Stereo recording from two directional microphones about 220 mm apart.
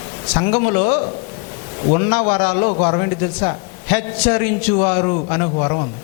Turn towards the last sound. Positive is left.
turn(degrees=25)  # may be behind; listen again after turning